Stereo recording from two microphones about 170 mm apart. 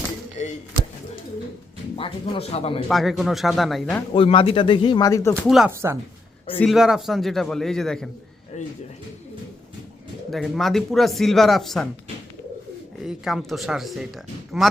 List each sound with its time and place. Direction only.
2.0 s speech: 30° left (ahead or behind)
2.9 s speech: centre (ahead or behind)
4.1 s speech: 30° left (ahead or behind)
5.3 s speech: 5° left (ahead or behind)
5.7 s speech: 15° right (ahead or behind)
6.6 s speech: centre (ahead or behind)
8.5 s speech: 45° left (ahead or behind)
10.3 s speech: centre (ahead or behind)
13.0 s speech: centre (ahead or behind)